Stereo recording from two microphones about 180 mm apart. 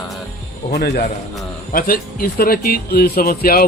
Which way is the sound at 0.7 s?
60° left (ahead or behind).